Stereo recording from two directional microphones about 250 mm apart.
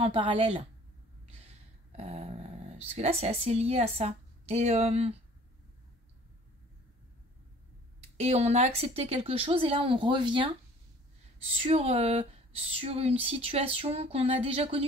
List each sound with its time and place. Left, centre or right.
0.0 s speech: right
1.9 s dog: right
2.9 s speech: right
8.0 s speech: right
11.5 s speech: right